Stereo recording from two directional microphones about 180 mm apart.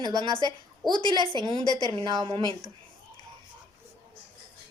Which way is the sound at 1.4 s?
25° right (ahead or behind).